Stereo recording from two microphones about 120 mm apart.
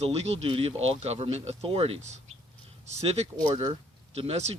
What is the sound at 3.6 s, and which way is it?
Speech, 45° right (ahead or behind).